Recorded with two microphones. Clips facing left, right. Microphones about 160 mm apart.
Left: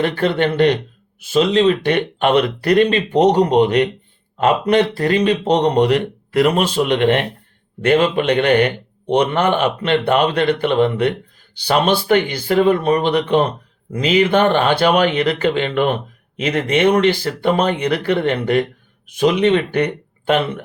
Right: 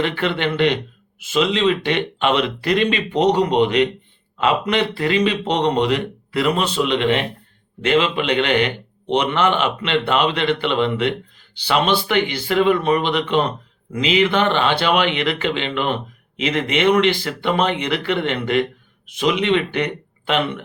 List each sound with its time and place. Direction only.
0.0 s a man's voice: 45° left (ahead or behind)